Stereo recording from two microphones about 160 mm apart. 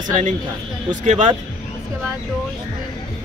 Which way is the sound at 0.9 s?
50° right (ahead or behind).